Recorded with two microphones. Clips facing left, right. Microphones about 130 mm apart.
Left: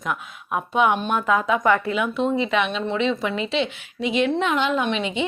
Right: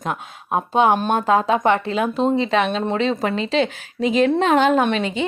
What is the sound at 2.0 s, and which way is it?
Speech, 35° right (ahead or behind).